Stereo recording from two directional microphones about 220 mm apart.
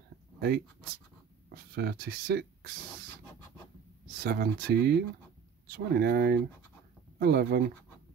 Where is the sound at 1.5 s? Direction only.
45° right (ahead or behind).